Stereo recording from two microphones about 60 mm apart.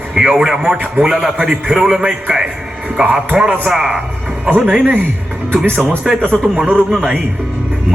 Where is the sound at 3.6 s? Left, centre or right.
Centre.